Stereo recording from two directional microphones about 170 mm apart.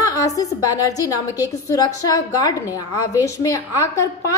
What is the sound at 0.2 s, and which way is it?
A woman's voice, 20° left (ahead or behind).